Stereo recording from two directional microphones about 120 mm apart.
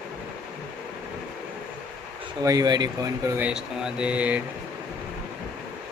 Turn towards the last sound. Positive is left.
turn(degrees=-10)  # may be behind; listen again after turning